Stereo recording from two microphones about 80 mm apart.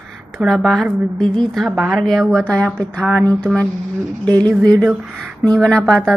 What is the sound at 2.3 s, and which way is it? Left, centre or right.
Speech, centre.